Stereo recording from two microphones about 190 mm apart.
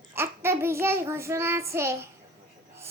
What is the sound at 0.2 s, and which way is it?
Child singing, 15° right (ahead or behind).